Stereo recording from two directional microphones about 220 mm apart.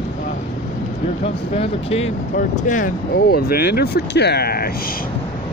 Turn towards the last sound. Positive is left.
turn(degrees=45)  # may be behind; listen again after turning